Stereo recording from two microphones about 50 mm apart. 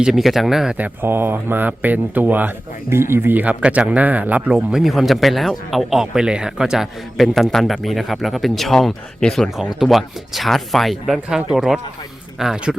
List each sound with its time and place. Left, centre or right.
0.2 s speech: centre
1.0 s speech: right
2.9 s speech: right
3.4 s speech: right
4.5 s speech: centre
7.2 s speech: centre